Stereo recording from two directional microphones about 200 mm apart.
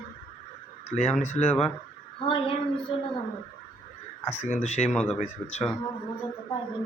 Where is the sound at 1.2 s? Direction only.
35° left (ahead or behind).